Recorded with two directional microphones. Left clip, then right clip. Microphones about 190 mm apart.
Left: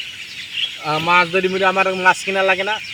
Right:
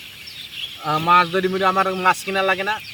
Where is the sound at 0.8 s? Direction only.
15° right (ahead or behind).